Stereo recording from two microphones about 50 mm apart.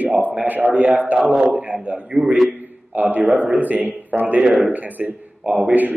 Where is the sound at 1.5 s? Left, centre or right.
Right.